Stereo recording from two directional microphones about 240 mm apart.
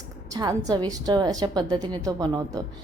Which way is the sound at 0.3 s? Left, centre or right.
Centre.